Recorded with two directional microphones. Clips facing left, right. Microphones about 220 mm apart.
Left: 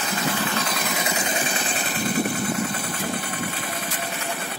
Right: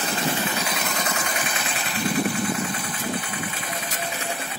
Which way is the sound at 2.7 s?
45° left (ahead or behind).